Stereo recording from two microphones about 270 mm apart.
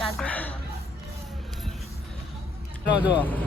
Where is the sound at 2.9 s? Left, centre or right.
Centre.